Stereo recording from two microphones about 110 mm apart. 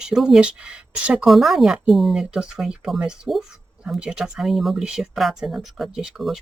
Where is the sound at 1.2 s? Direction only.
Centre (ahead or behind).